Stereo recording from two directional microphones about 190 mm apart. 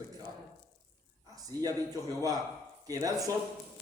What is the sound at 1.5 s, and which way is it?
A man's voice, 20° right (ahead or behind).